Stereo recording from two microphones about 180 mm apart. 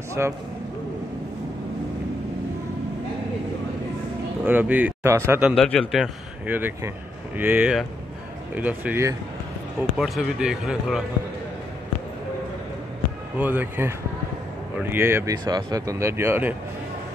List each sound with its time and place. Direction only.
0.2 s speech: 15° right (ahead or behind)
4.5 s speech: 10° right (ahead or behind)
5.6 s speech: 5° left (ahead or behind)
13.4 s speech: 10° right (ahead or behind)